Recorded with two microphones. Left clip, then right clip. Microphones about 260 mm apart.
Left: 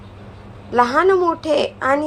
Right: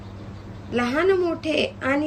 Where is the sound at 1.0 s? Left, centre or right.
Centre.